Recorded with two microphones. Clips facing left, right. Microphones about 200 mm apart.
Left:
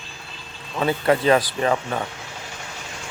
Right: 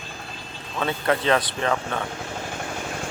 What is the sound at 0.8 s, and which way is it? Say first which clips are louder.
Speech: left 4 dB; 10° left (ahead or behind).